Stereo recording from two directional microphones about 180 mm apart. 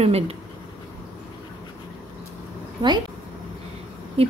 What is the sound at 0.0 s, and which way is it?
Speech, 35° right (ahead or behind).